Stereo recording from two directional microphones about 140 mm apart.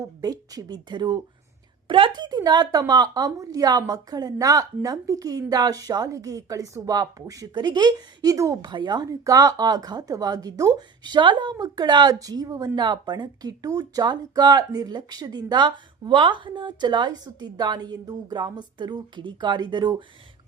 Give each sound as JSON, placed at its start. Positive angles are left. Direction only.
{"t": 0.0, "sound": "a woman's voice", "side_deg": -25}